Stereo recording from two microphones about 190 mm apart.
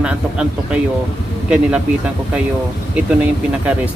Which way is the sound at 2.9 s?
10° right (ahead or behind).